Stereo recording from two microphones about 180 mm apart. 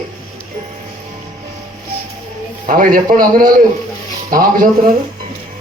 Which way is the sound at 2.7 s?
50° right (ahead or behind).